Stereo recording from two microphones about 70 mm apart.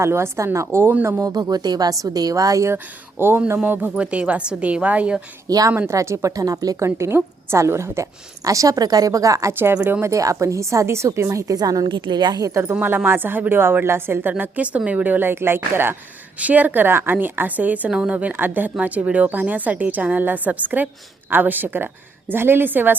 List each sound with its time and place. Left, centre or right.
0.0 s a woman's voice: right
1.2 s a woman's voice: right
2.7 s a woman's voice: right
3.9 s a woman's voice: centre
5.5 s a woman's voice: right
5.9 s a woman's voice: right
6.7 s a woman's voice: right
8.4 s a woman's voice: right
9.5 s a woman's voice: right
10.0 s a woman's voice: right
11.5 s a woman's voice: right
12.7 s a woman's voice: right